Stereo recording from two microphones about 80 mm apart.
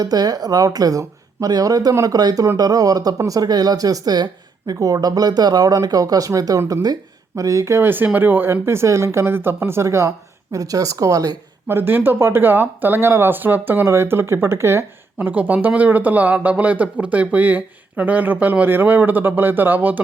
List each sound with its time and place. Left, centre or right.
0.0 s speech: right
11.7 s a woman's voice: right
15.3 s speech: centre